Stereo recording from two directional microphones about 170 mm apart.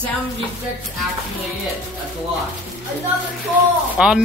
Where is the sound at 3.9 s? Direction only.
5° right (ahead or behind).